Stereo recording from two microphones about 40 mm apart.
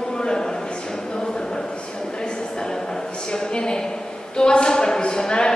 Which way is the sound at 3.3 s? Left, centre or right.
Left.